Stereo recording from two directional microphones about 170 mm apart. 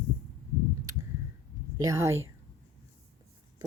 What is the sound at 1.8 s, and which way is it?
Speech, 20° right (ahead or behind).